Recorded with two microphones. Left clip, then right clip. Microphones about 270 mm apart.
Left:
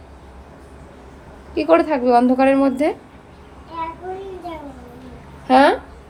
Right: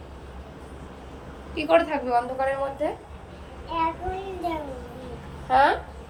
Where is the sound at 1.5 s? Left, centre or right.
Centre.